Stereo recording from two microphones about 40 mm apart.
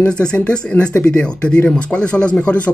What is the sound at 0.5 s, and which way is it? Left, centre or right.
Speech, left.